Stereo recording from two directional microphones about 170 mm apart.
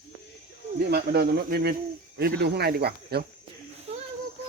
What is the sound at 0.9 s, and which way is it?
Speech, 70° right (ahead or behind).